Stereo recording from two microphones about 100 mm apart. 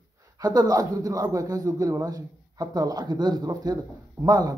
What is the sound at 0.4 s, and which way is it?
A man's voice, 40° right (ahead or behind).